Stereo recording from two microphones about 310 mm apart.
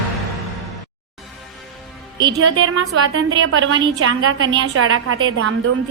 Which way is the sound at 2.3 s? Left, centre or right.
Right.